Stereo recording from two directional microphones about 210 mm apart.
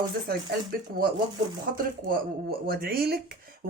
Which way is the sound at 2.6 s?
45° right (ahead or behind).